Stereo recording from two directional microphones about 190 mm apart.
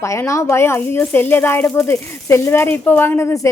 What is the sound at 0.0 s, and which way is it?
Speech, 15° left (ahead or behind).